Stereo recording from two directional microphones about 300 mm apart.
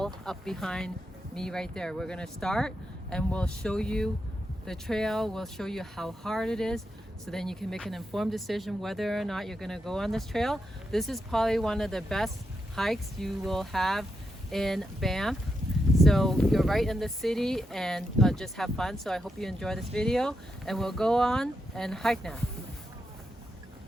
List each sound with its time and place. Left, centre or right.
0.0 s speech: centre